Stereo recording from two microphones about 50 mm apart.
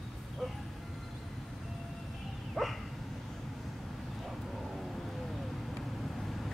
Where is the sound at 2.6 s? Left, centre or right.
Centre.